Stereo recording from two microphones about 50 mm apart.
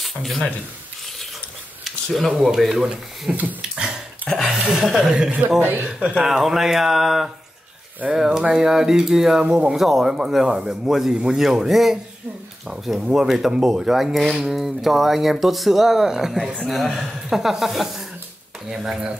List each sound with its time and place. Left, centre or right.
0.0 s speech: centre
2.0 s speech: centre
2.3 s speech: centre
2.9 s speech: right
4.3 s a sound: centre
4.6 s speech: centre
5.1 s a man's voice: right
5.6 s speech: right
6.2 s speech: centre
9.4 s a man's voice: centre
9.7 s speech: centre